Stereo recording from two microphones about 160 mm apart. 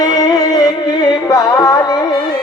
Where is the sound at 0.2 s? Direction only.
25° left (ahead or behind).